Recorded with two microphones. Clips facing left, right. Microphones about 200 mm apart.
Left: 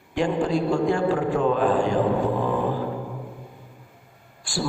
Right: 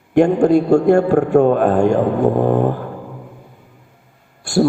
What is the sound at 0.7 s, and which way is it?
A man's voice, 65° right (ahead or behind).